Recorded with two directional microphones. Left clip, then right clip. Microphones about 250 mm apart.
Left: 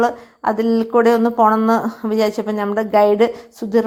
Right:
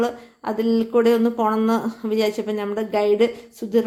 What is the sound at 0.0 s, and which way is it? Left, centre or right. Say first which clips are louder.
Speech: left 7 dB; centre.